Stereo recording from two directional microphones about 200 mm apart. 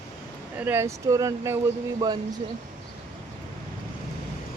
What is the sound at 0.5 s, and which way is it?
Speech, 10° right (ahead or behind).